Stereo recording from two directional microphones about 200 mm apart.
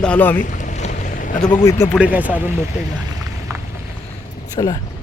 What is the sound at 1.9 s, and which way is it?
Speech, 5° right (ahead or behind).